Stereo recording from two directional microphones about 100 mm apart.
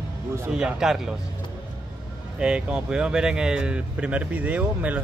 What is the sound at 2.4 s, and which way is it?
Speech, 10° right (ahead or behind).